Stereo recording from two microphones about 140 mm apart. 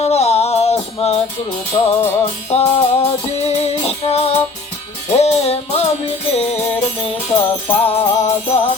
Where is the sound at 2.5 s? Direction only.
45° left (ahead or behind).